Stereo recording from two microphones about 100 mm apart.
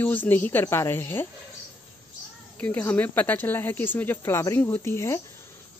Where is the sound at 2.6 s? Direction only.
15° left (ahead or behind).